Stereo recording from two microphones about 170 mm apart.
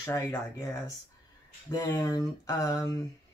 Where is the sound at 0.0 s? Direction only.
20° left (ahead or behind).